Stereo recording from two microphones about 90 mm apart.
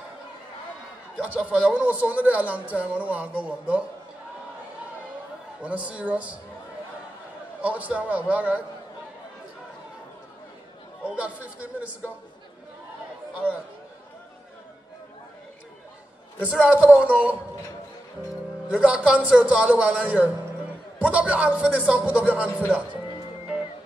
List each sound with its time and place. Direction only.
1.2 s speech: 15° right (ahead or behind)
5.6 s speech: 15° right (ahead or behind)
7.6 s speech: 15° right (ahead or behind)
11.1 s speech: 15° right (ahead or behind)
16.3 s speech: 15° right (ahead or behind)
18.7 s speech: 15° right (ahead or behind)